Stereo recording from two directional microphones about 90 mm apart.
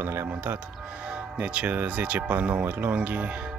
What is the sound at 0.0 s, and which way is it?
Speech, 25° right (ahead or behind).